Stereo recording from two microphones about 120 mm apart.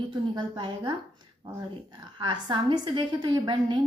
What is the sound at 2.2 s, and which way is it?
A woman's voice, 40° right (ahead or behind).